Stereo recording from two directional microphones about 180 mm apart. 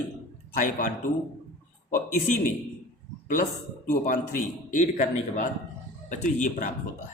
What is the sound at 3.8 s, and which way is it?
A man's voice, 45° left (ahead or behind).